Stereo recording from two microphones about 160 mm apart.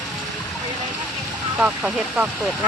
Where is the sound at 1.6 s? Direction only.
10° right (ahead or behind).